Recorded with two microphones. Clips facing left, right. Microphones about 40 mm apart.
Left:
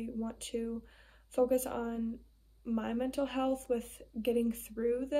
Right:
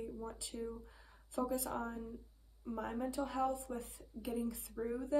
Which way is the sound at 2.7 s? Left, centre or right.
Left.